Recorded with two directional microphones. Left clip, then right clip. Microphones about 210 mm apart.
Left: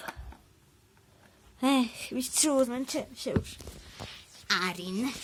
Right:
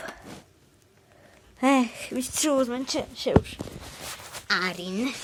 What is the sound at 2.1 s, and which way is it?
Speech, 40° left (ahead or behind).